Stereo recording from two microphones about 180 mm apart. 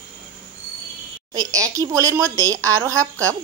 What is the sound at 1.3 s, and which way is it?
A woman's voice, 20° right (ahead or behind).